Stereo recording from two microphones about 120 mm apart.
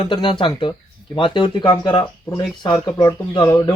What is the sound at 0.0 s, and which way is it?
Speech, 45° left (ahead or behind).